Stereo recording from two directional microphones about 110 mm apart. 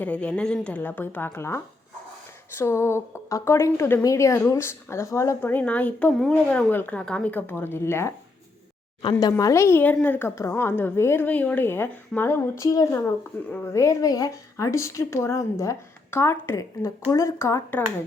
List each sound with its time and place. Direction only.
0.0 s a woman's voice: 15° left (ahead or behind)
5.5 s a woman's voice: 15° left (ahead or behind)
9.4 s a woman's voice: 25° left (ahead or behind)
12.6 s a woman's voice: 35° left (ahead or behind)